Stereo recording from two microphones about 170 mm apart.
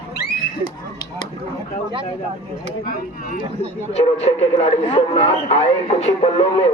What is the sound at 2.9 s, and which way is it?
Speech, 55° left (ahead or behind).